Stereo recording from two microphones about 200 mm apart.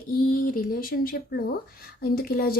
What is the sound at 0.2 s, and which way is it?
Speech, 45° left (ahead or behind).